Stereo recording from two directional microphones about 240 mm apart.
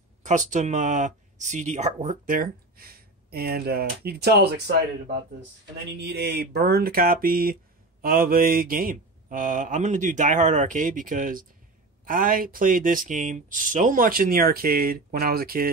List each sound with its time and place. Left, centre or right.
0.2 s speech: right
5.9 s speech: right